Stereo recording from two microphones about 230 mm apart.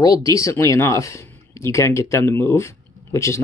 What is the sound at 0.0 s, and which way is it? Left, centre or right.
Speech, centre.